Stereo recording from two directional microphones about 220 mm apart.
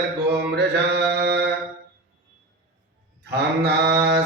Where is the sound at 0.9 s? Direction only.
50° right (ahead or behind).